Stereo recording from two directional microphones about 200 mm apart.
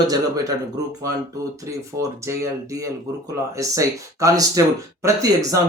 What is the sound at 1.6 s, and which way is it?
Speech, 15° right (ahead or behind).